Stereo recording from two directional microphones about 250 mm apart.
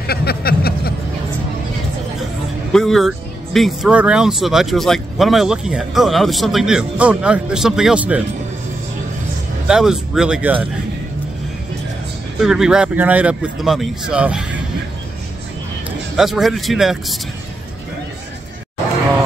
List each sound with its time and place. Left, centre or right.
0.0 s a sound: left
2.7 s speech: centre
9.7 s speech: centre
12.4 s speech: centre
16.2 s speech: centre